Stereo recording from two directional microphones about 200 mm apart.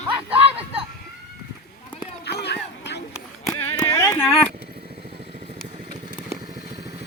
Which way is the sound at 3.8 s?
15° left (ahead or behind).